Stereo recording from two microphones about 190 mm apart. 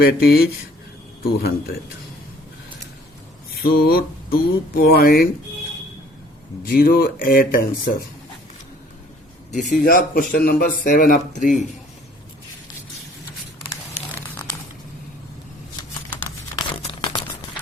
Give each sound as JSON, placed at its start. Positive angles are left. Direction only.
{"t": 0.0, "sound": "a man's voice", "side_deg": 60}
{"t": 3.5, "sound": "mantra", "side_deg": 55}
{"t": 4.9, "sound": "a man's voice", "side_deg": 55}
{"t": 6.7, "sound": "a man's voice", "side_deg": 55}
{"t": 9.5, "sound": "a man's voice", "side_deg": 40}
{"t": 13.7, "sound": "a sound", "side_deg": 15}
{"t": 16.6, "sound": "crumpling", "side_deg": 20}